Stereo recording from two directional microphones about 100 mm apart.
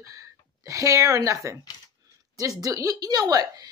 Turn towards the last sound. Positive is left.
turn(degrees=-40)  # may be behind; listen again after turning